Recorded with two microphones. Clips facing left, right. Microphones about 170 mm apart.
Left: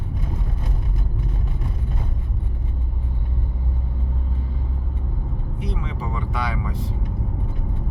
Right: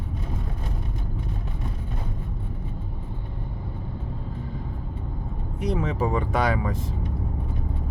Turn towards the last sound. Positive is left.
turn(degrees=-45)  # may be behind; listen again after turning